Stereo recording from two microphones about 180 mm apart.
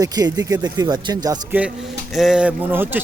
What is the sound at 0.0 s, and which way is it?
Speech, 20° right (ahead or behind).